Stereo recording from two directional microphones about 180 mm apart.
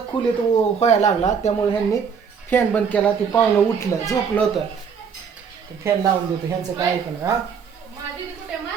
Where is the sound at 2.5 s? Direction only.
10° left (ahead or behind).